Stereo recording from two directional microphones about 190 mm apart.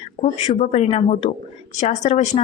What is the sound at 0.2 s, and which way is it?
A woman's voice, 40° left (ahead or behind).